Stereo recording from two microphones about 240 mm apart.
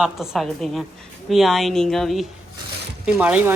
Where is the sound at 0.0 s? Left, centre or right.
Centre.